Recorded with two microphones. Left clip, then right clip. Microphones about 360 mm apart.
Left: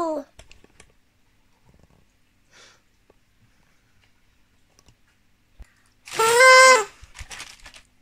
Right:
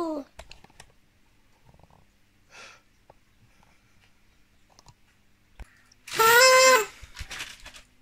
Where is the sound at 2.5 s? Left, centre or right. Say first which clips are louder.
Right 4 dB; right.